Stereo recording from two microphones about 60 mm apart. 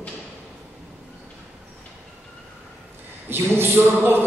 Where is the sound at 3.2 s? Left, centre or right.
Right.